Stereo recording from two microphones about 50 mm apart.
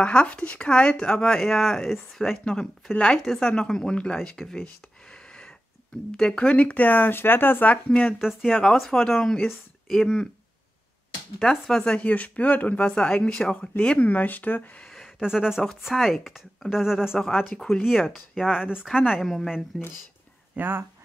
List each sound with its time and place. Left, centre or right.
0.0 s speech: left
6.3 s speech: left
7.7 s speech: left
8.2 s speech: centre
8.5 s speech: centre
11.4 s speech: centre
12.0 s speech: left; by 13.7 s centre
13.7 s speech: left
15.1 s speech: centre
19.2 s a woman's voice: centre
19.7 s speech: centre
20.5 s speech: right